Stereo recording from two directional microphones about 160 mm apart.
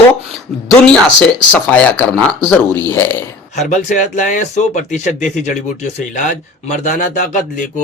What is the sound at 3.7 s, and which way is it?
Speech, 50° left (ahead or behind).